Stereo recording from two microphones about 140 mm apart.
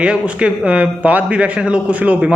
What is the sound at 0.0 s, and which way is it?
A man's voice, 5° right (ahead or behind).